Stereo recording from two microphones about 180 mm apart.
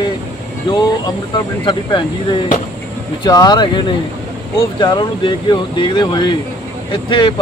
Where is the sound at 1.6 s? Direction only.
25° left (ahead or behind).